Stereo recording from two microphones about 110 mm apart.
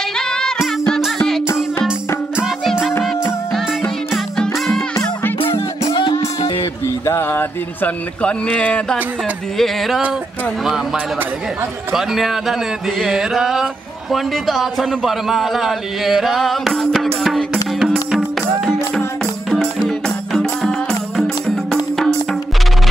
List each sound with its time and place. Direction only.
0.3 s music: 5° left (ahead or behind)
2.3 s music: 5° right (ahead or behind)
3.5 s music: 5° left (ahead or behind)
5.9 s music: 45° left (ahead or behind)
6.4 s a sound: 50° left (ahead or behind)
7.1 s speech: 20° left (ahead or behind)
9.6 s speech: centre (ahead or behind)
11.9 s speech: centre (ahead or behind)
17.8 s music: centre (ahead or behind)
19.5 s music: 5° left (ahead or behind)